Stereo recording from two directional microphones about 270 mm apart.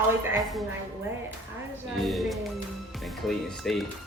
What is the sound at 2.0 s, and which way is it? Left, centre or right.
A woman's voice, centre.